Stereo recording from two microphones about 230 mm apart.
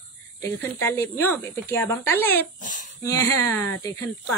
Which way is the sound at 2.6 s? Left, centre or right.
Left.